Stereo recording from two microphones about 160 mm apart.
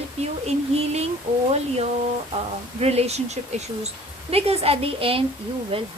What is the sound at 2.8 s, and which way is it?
Speech, 40° right (ahead or behind).